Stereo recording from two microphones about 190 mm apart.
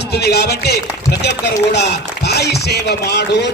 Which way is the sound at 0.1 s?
60° left (ahead or behind).